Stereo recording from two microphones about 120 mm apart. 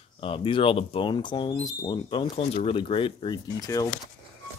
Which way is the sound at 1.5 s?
30° left (ahead or behind).